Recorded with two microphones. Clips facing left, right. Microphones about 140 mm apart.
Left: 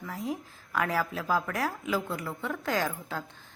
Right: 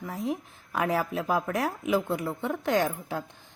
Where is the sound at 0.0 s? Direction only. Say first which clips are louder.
Right 3 dB; 25° right (ahead or behind).